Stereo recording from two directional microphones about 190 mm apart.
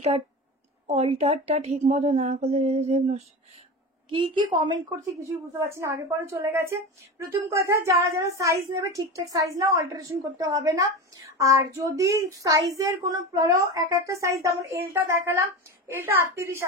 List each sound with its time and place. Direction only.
0.8 s speech: 35° right (ahead or behind)
4.1 s a woman's voice: 25° right (ahead or behind)